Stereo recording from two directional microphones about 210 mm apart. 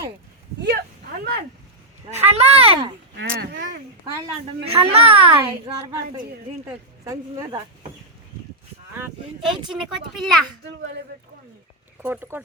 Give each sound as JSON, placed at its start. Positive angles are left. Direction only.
{"t": 1.2, "sound": "speech", "side_deg": -45}
{"t": 2.0, "sound": "a child's voice", "side_deg": -30}
{"t": 4.6, "sound": "a child's voice", "side_deg": -30}
{"t": 7.0, "sound": "a woman's voice", "side_deg": -15}
{"t": 9.0, "sound": "speech", "side_deg": 0}
{"t": 12.0, "sound": "a woman's voice", "side_deg": -10}